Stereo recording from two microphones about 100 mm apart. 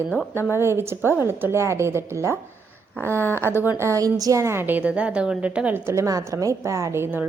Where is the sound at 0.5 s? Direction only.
25° right (ahead or behind).